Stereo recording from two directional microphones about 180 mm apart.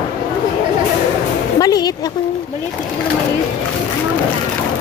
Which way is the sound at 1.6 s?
20° left (ahead or behind).